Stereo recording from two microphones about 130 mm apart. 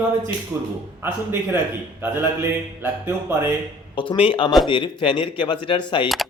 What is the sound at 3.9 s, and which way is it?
Speech, 40° left (ahead or behind).